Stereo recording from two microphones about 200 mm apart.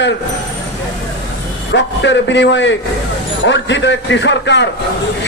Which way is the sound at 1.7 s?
65° left (ahead or behind).